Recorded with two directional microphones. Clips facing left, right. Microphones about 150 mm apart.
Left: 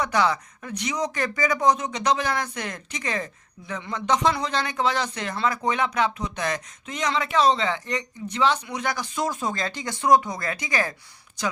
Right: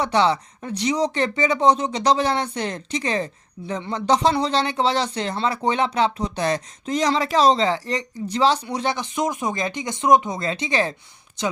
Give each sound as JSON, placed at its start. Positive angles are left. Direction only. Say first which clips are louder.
{"t": 0.0, "sound": "speech", "louder": "right 3 dB", "side_deg": -30}